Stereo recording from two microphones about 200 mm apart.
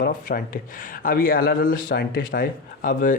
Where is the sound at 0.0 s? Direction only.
45° left (ahead or behind).